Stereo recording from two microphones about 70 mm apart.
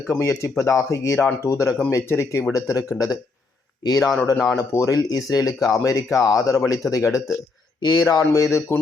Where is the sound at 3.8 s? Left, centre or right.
Left.